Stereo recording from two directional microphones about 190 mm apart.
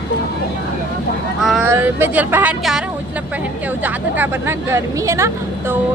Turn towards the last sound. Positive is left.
turn(degrees=-15)  # may be behind; listen again after turning